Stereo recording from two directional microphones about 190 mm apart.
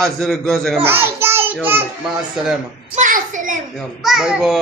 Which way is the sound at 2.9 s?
40° right (ahead or behind).